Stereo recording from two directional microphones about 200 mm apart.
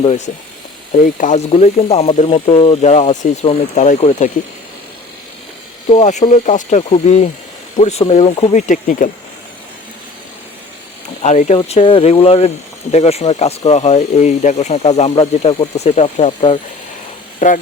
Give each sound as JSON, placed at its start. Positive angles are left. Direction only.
{"t": 1.0, "sound": "speech", "side_deg": 40}
{"t": 5.9, "sound": "speech", "side_deg": 35}
{"t": 11.2, "sound": "speech", "side_deg": 35}